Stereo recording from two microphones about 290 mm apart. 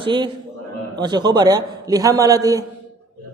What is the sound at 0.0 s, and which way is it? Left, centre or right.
A man's voice, centre.